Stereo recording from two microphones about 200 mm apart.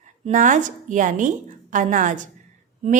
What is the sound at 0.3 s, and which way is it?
A woman's voice, 40° right (ahead or behind).